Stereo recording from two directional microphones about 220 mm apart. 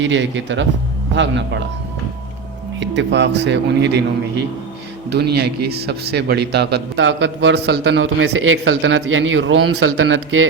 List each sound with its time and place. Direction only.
0.0 s speech: 55° right (ahead or behind)
2.8 s a man's voice: 55° right (ahead or behind)
5.0 s a man's voice: 50° right (ahead or behind); by 10.4 s 65° right (ahead or behind)